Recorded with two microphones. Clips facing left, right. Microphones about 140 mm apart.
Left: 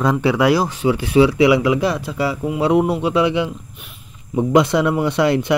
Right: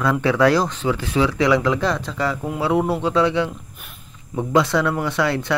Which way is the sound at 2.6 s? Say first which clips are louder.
Left 3 dB; 20° left (ahead or behind).